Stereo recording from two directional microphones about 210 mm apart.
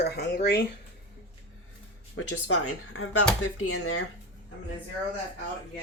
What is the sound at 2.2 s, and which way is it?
Speech, 65° left (ahead or behind).